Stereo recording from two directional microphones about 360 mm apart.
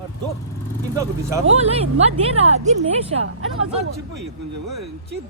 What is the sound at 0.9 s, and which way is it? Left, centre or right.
Speech, centre.